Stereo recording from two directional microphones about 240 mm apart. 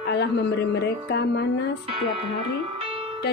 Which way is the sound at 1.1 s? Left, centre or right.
Left.